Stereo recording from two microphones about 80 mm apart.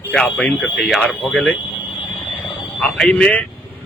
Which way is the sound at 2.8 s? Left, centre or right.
Centre.